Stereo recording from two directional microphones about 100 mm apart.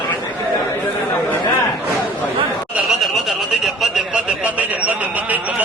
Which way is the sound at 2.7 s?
5° right (ahead or behind).